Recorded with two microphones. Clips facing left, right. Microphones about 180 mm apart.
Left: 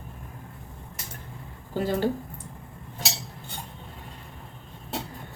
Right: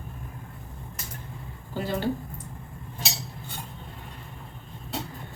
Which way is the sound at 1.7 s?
45° left (ahead or behind).